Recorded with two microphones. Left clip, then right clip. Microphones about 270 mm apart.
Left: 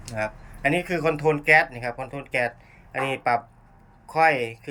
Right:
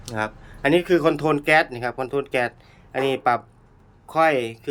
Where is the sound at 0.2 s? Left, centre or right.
Centre.